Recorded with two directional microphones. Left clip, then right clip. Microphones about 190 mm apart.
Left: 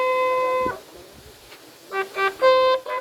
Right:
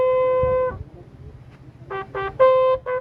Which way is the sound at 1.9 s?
20° right (ahead or behind).